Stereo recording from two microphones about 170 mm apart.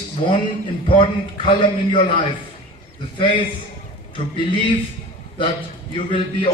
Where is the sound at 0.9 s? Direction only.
30° left (ahead or behind).